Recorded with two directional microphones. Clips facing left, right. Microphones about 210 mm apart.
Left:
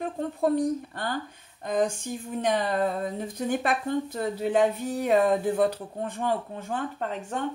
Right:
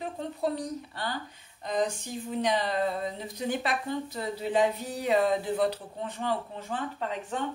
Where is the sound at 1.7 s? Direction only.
50° left (ahead or behind).